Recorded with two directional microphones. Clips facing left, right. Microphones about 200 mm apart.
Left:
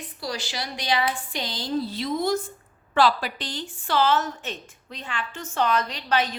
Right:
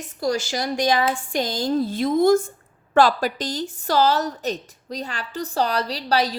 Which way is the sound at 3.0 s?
45° right (ahead or behind).